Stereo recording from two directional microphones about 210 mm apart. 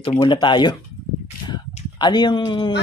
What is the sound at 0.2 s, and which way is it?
Speech, 20° left (ahead or behind).